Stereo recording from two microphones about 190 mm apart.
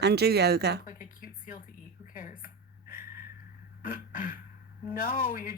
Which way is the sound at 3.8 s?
45° left (ahead or behind).